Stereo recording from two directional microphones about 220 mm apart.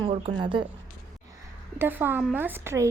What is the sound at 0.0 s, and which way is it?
Speech, 25° right (ahead or behind).